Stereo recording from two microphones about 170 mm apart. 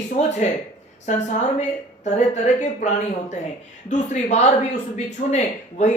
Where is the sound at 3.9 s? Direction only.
45° left (ahead or behind).